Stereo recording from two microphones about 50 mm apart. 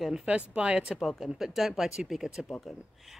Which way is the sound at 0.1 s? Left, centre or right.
Right.